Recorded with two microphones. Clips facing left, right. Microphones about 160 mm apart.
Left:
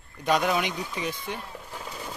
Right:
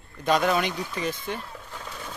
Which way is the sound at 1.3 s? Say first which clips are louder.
Right 2 dB; 10° left (ahead or behind).